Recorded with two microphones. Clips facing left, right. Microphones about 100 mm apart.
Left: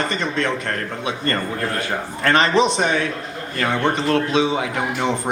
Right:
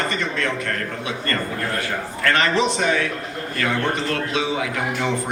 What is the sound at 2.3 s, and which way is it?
Speech, 20° left (ahead or behind).